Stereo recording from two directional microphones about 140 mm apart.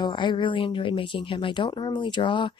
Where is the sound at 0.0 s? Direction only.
35° left (ahead or behind).